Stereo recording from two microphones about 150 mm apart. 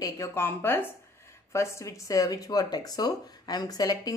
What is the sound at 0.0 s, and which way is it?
A woman's voice, 20° left (ahead or behind).